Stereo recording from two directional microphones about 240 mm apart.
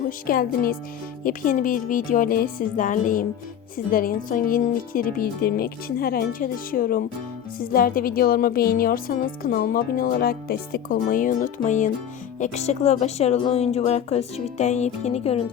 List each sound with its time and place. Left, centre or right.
0.3 s a woman's voice: left